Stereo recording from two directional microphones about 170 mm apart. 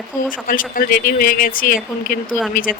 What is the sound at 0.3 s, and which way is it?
Speech, 55° left (ahead or behind).